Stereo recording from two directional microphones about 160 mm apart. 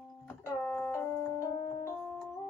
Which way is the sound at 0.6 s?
10° left (ahead or behind).